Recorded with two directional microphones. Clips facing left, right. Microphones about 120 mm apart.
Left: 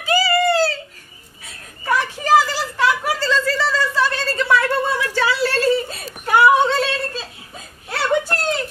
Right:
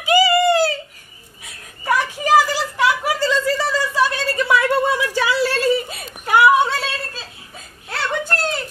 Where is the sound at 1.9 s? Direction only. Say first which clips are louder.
Even; 15° right (ahead or behind).